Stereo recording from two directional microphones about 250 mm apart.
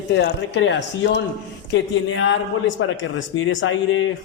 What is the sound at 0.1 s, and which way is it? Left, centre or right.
Speech, left.